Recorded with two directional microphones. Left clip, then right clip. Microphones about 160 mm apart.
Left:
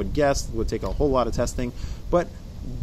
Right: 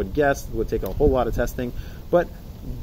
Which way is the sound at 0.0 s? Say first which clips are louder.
Right 1 dB; 30° left (ahead or behind).